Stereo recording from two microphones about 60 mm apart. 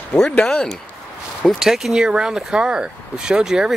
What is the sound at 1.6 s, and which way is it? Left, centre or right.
Speech, centre.